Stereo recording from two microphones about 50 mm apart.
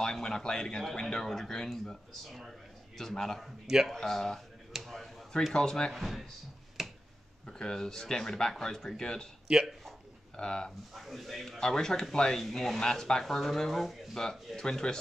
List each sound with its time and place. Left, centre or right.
0.0 s speech: centre
3.4 s speech: centre
3.9 s speech: centre
4.8 s a sound: centre
5.5 s speech: centre
5.9 s speech: centre
6.8 s finger snapping: centre
7.4 s speech: centre
9.5 s a man's voice: centre
10.3 s speech: centre
11.0 s speech: centre
14.6 s speech: centre